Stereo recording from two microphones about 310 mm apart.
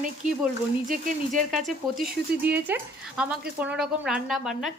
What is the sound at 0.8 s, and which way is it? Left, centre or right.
Speech, right.